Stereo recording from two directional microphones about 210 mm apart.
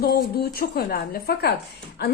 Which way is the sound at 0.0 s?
45° left (ahead or behind).